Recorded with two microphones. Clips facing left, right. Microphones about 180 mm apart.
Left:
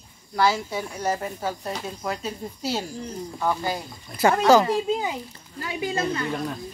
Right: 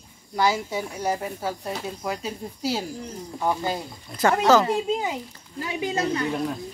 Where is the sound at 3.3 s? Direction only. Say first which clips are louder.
Right 1 dB; 20° right (ahead or behind).